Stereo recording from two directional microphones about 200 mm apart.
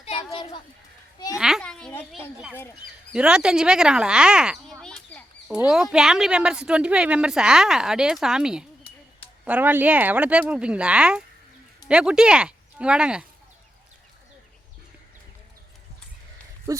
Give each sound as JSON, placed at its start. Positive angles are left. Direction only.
{"t": 0.0, "sound": "children playing", "side_deg": 30}
{"t": 1.4, "sound": "a child's voice", "side_deg": 0}
{"t": 3.1, "sound": "a woman's voice", "side_deg": -5}
{"t": 16.7, "sound": "speech", "side_deg": -15}